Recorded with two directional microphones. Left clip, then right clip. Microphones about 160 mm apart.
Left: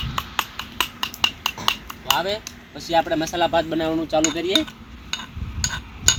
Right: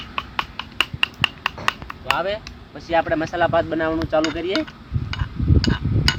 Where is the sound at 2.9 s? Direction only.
Centre (ahead or behind).